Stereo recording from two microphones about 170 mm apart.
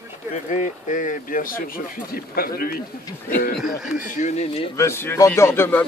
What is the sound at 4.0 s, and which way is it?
Speech, 50° left (ahead or behind).